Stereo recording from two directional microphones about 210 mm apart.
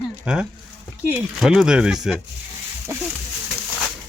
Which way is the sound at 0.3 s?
5° right (ahead or behind).